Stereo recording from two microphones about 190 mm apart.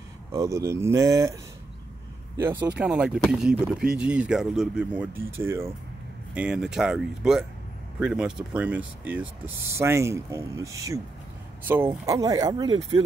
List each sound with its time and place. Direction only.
0.3 s speech: 15° right (ahead or behind)
2.8 s speech: 5° right (ahead or behind); by 13.0 s 25° right (ahead or behind)